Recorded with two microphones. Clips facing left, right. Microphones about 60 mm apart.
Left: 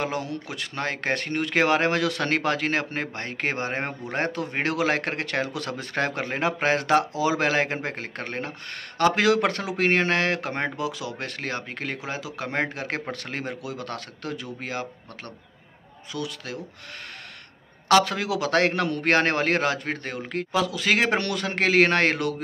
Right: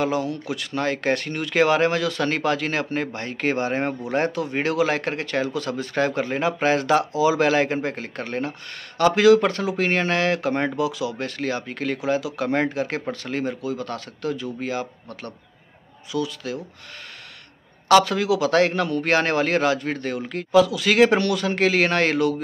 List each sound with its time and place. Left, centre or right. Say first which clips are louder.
0.0 s a man's voice: right 5 dB; left
10.9 s a man's voice: right 5 dB; left
12.7 s a man's voice: right 5 dB; left
13.6 s speech: right 5 dB; left
17.8 s a man's voice: right 4 dB; left